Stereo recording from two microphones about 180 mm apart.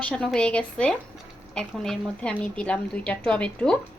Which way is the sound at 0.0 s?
5° left (ahead or behind).